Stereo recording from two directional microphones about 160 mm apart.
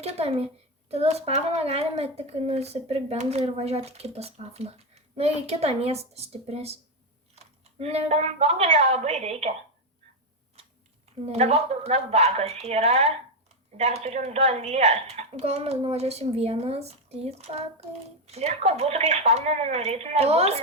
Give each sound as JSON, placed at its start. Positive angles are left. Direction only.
{"t": 0.0, "sound": "a woman's voice", "side_deg": -40}
{"t": 11.3, "sound": "a woman's voice", "side_deg": -40}